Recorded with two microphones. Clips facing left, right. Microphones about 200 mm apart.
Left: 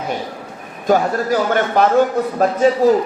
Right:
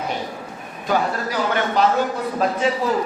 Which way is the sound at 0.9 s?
45° left (ahead or behind).